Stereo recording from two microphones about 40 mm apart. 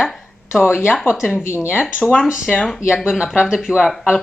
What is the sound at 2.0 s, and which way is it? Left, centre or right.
Speech, right.